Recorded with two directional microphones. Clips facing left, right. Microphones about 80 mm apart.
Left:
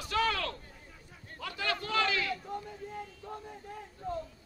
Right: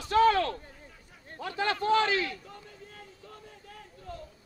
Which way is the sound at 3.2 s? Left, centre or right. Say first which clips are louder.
Left 6 dB; left.